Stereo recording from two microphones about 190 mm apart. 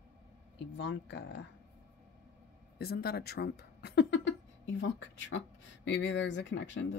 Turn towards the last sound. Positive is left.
turn(degrees=70)  # may be behind; listen again after turning